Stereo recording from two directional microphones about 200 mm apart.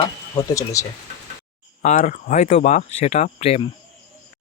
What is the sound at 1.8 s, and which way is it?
Speech, 40° left (ahead or behind).